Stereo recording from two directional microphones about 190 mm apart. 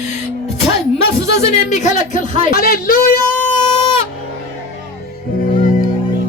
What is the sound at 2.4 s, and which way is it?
Speech, 50° left (ahead or behind).